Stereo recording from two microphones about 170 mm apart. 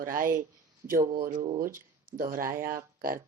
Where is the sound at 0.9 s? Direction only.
55° right (ahead or behind).